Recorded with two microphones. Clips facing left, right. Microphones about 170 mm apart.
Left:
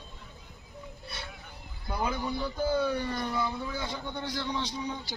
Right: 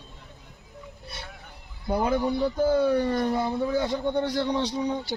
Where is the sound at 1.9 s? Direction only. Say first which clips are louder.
Right 8 dB; 45° right (ahead or behind).